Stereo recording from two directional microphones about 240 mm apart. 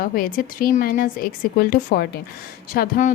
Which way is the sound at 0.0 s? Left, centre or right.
Left.